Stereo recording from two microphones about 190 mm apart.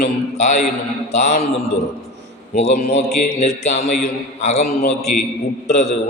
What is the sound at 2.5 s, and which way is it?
A man's voice, 35° left (ahead or behind).